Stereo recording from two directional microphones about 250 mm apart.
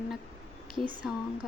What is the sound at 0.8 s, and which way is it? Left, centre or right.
Speech, centre.